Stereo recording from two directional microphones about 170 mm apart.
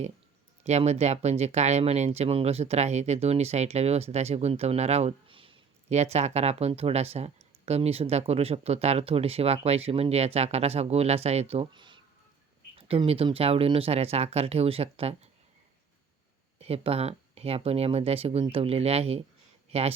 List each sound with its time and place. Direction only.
0.6 s speech: 40° right (ahead or behind)
16.6 s speech: 35° right (ahead or behind)